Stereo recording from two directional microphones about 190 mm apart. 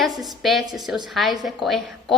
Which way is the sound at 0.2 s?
Centre (ahead or behind).